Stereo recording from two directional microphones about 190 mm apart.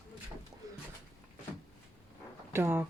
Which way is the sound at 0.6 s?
20° right (ahead or behind).